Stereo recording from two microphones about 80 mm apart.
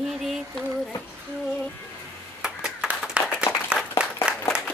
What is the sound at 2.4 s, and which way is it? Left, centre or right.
Clapping, centre.